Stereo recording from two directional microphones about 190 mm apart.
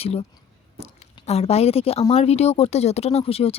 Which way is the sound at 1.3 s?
35° left (ahead or behind).